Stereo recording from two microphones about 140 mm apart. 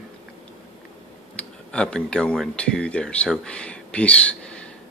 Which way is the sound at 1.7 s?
5° left (ahead or behind).